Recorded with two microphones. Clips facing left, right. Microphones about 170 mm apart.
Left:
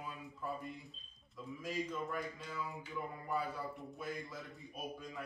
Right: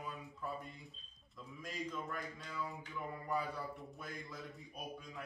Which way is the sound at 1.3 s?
Centre (ahead or behind).